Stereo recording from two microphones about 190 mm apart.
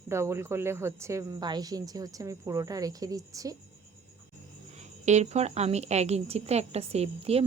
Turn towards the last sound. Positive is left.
turn(degrees=-30)  # may be behind; listen again after turning